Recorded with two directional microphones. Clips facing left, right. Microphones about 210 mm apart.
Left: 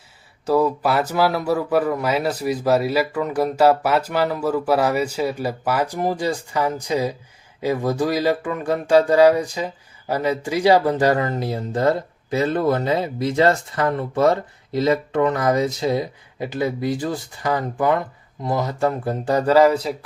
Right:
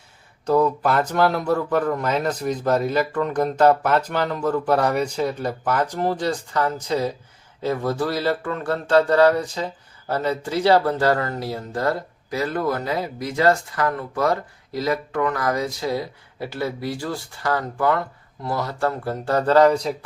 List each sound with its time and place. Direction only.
0.4 s a man's voice: 5° left (ahead or behind)